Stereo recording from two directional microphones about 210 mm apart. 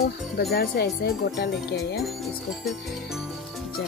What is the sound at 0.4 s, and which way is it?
Speech, 50° left (ahead or behind).